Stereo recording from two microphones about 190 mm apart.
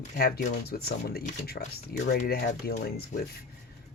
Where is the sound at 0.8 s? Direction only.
55° left (ahead or behind).